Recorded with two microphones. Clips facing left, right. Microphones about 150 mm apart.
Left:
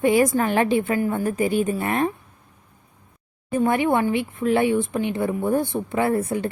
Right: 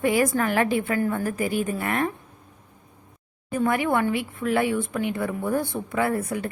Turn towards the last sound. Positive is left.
turn(degrees=25)  # may be behind; listen again after turning